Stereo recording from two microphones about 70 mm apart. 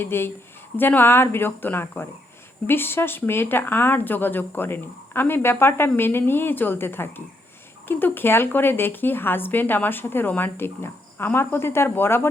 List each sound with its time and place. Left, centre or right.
0.0 s a woman's voice: left